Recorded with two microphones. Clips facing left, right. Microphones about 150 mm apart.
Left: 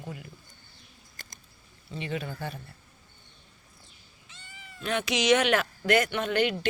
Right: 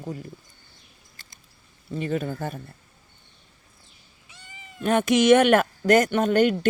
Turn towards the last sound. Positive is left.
turn(degrees=-45)  # may be behind; listen again after turning